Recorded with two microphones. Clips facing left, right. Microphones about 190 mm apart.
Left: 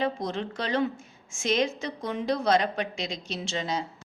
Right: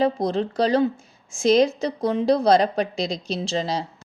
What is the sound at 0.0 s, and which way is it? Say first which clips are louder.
A woman's voice: right 8 dB; 35° right (ahead or behind).